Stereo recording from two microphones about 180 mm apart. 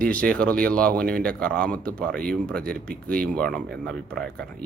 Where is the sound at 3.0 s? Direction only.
50° right (ahead or behind).